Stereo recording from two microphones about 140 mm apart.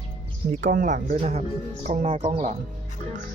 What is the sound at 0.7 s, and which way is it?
Speech, 80° right.